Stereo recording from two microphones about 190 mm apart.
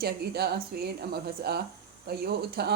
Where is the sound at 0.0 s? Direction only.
55° right (ahead or behind).